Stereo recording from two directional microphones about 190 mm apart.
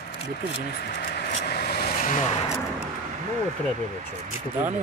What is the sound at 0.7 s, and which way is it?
Vehicle, 55° left (ahead or behind).